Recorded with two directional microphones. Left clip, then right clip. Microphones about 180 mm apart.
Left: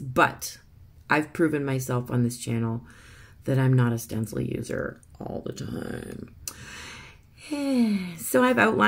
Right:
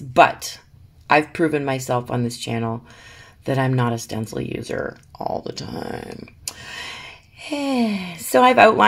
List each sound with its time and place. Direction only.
0.1 s speech: 10° left (ahead or behind)